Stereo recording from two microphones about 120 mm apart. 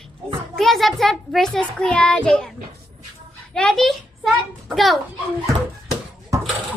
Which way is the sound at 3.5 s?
5° left (ahead or behind).